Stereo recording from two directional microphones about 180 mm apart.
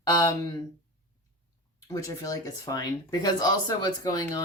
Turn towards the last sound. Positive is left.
turn(degrees=20)  # may be behind; listen again after turning